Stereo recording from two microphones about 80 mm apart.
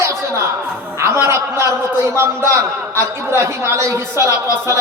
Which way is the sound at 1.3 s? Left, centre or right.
Right.